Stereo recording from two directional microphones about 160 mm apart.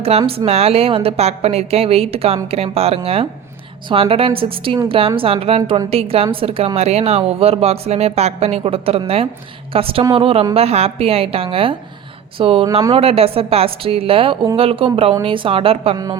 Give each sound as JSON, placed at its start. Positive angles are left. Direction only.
{"t": 0.0, "sound": "a woman's voice", "side_deg": -40}